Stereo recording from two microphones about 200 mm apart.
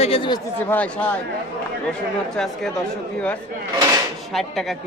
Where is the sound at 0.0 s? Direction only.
25° left (ahead or behind).